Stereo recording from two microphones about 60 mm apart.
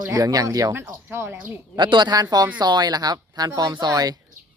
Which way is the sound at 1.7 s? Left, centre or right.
Right.